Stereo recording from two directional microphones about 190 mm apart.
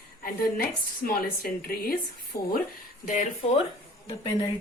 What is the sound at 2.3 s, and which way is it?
Speech, 15° left (ahead or behind).